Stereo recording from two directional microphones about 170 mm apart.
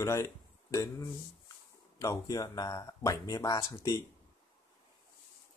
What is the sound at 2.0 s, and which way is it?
Speech, 20° left (ahead or behind).